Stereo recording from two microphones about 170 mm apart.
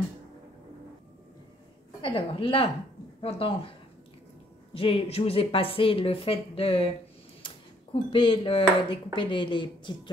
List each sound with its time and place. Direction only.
2.0 s a woman's voice: 30° left (ahead or behind)
4.7 s a woman's voice: 35° left (ahead or behind)
7.4 s a sound: 30° left (ahead or behind)
9.1 s a woman's voice: 30° left (ahead or behind)